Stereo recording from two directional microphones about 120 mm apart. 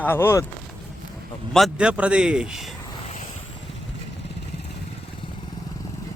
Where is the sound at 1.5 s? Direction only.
5° right (ahead or behind).